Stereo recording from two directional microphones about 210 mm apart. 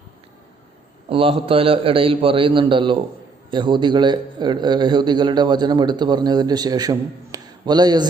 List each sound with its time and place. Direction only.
1.1 s a man's voice: 25° right (ahead or behind)